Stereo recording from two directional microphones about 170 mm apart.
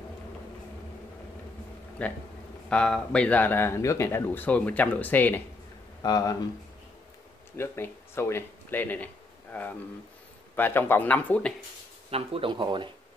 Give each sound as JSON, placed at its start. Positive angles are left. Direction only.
{"t": 2.0, "sound": "speech", "side_deg": 10}
{"t": 6.0, "sound": "speech", "side_deg": 20}
{"t": 7.5, "sound": "speech", "side_deg": 15}
{"t": 12.1, "sound": "speech", "side_deg": -35}